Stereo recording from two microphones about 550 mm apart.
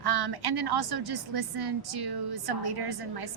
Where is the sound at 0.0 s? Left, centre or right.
Right.